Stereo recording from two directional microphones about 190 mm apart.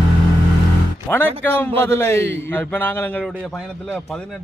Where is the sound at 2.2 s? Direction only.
70° right (ahead or behind).